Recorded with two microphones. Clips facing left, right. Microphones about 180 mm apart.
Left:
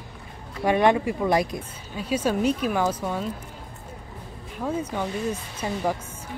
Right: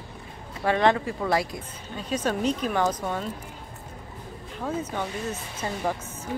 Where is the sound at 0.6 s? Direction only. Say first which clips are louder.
Left 2 dB; 15° left (ahead or behind).